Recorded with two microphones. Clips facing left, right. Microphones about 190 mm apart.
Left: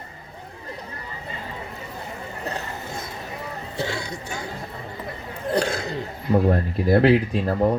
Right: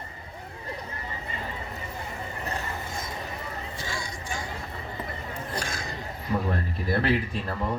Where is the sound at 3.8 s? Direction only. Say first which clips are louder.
Left 7 dB; 65° left (ahead or behind).